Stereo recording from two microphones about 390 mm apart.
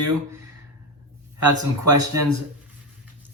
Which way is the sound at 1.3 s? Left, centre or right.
Right.